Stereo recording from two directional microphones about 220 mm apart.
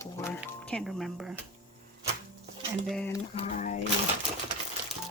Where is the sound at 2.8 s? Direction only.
Centre (ahead or behind).